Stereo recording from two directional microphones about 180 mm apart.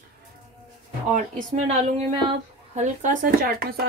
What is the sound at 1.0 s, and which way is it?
Speech, 45° right (ahead or behind).